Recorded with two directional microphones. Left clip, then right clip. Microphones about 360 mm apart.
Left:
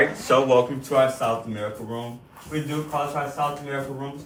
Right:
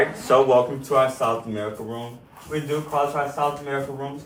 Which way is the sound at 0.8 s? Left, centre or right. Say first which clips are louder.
Right 1 dB; centre.